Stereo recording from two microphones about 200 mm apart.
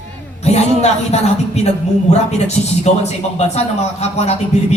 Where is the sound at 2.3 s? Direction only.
35° left (ahead or behind).